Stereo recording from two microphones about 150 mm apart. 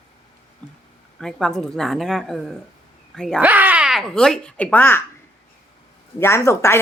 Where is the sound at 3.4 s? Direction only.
10° right (ahead or behind); by 5.0 s 15° left (ahead or behind).